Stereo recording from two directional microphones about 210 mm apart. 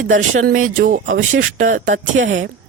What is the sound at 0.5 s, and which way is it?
Speech, 75° right (ahead or behind).